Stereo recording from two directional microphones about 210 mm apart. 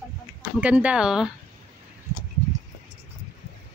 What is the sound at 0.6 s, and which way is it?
Speech, 5° right (ahead or behind).